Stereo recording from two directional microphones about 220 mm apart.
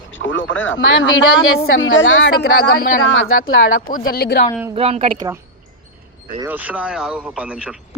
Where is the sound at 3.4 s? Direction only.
40° left (ahead or behind).